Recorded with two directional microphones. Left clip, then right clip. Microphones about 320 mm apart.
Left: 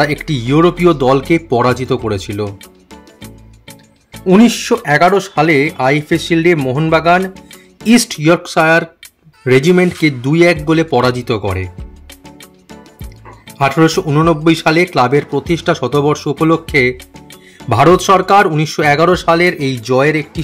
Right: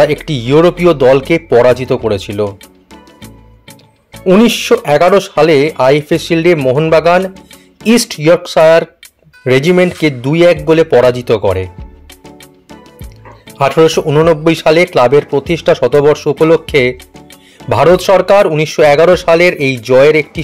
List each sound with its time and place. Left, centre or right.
0.0 s speech: centre
2.4 s music: centre
4.3 s speech: centre
12.3 s music: centre
13.6 s speech: centre
16.9 s music: centre
17.6 s speech: centre